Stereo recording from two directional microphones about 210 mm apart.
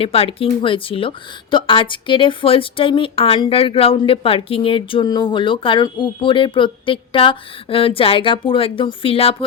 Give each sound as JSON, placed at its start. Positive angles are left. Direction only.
{"t": 0.0, "sound": "speech", "side_deg": 25}